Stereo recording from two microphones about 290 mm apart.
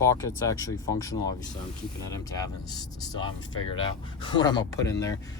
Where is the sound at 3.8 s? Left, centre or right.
Centre.